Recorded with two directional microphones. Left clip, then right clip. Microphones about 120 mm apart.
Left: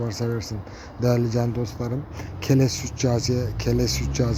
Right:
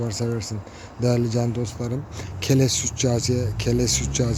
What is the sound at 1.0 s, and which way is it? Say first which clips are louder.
A man's voice: even; 15° right (ahead or behind).